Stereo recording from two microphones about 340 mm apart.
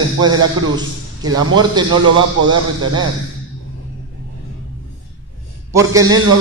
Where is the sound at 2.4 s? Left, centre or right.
Right.